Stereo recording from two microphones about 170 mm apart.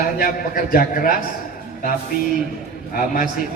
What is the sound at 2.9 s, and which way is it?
Speech, 55° left (ahead or behind).